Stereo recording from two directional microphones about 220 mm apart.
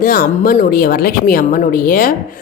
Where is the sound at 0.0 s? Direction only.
40° left (ahead or behind).